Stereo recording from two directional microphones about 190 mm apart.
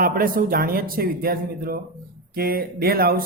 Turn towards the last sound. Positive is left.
turn(degrees=-50)  # may be behind; listen again after turning